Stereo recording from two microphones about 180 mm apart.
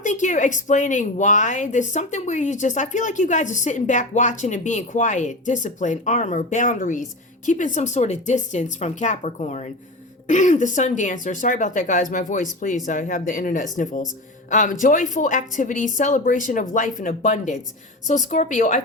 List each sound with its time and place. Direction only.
0.0 s speech: 45° left (ahead or behind)